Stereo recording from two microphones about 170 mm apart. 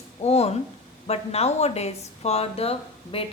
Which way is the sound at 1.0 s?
35° left (ahead or behind).